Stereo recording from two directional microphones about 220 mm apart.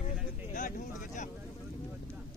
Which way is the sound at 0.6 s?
35° left (ahead or behind).